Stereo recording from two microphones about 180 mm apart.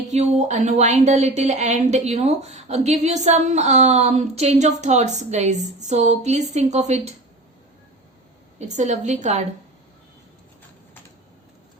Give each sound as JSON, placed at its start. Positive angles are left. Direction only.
{"t": 0.1, "sound": "speech", "side_deg": -40}
{"t": 8.5, "sound": "speech", "side_deg": -40}